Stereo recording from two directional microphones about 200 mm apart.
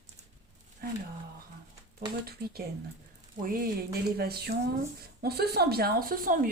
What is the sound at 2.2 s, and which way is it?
Speech, 50° right (ahead or behind).